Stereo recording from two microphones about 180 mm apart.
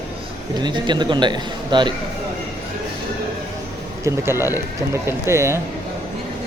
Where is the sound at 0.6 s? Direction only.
25° right (ahead or behind).